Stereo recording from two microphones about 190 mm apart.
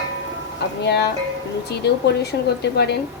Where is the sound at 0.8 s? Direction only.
60° left (ahead or behind).